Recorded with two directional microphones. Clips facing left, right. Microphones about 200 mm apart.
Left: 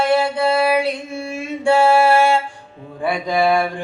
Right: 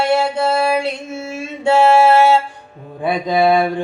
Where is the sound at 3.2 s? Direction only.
20° right (ahead or behind).